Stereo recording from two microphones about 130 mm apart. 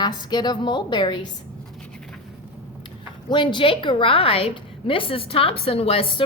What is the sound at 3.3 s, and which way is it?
A woman's voice, 40° left (ahead or behind).